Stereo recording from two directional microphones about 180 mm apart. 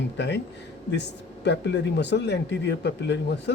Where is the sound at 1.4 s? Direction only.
70° left (ahead or behind).